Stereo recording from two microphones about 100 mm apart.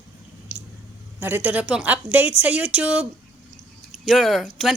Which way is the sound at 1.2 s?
15° right (ahead or behind).